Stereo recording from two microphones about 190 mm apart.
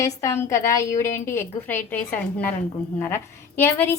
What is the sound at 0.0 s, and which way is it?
A woman's voice, 15° left (ahead or behind).